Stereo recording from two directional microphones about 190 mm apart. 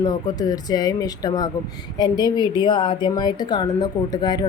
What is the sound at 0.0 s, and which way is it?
A woman's voice, 20° left (ahead or behind).